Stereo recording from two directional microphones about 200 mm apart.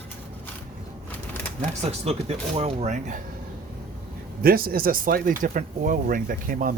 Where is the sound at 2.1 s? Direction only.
30° right (ahead or behind).